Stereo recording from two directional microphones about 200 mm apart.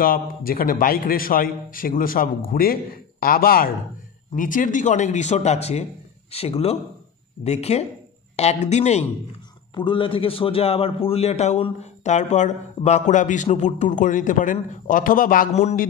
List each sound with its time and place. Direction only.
0.0 s a man's voice: 45° left (ahead or behind)